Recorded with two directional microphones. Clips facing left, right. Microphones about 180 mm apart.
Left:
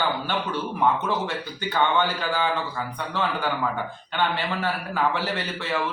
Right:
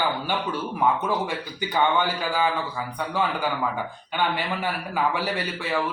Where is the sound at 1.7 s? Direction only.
10° right (ahead or behind).